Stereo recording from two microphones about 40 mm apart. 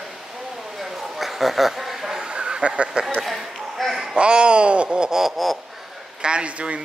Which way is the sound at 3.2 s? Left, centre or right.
Centre.